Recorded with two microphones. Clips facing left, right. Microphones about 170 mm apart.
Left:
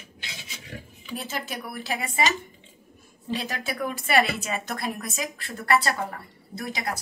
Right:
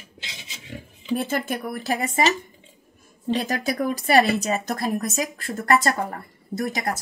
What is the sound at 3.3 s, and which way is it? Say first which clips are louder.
Speech: right 6 dB; 45° right (ahead or behind).